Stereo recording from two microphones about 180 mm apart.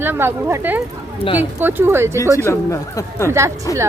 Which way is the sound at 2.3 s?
15° left (ahead or behind).